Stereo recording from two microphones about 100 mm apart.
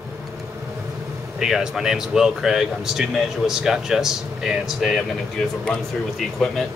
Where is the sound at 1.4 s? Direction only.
5° right (ahead or behind).